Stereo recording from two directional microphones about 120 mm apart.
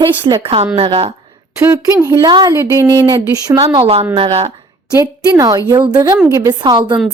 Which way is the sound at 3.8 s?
55° right (ahead or behind).